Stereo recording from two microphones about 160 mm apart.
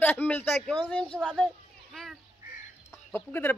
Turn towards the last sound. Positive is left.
turn(degrees=10)  # may be behind; listen again after turning